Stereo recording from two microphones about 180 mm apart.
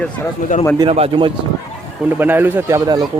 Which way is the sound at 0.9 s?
30° right (ahead or behind).